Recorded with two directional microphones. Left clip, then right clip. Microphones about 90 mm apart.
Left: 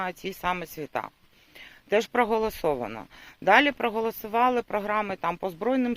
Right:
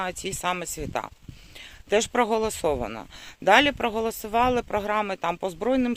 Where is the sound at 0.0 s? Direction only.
25° right (ahead or behind).